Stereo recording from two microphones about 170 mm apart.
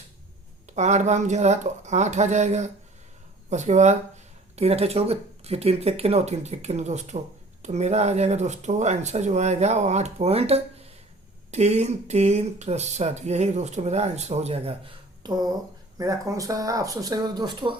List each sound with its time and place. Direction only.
0.7 s speech: 45° right (ahead or behind)
15.2 s speech: 25° right (ahead or behind)